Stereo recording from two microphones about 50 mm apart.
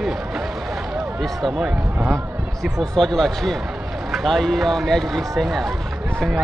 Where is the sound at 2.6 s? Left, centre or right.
Centre.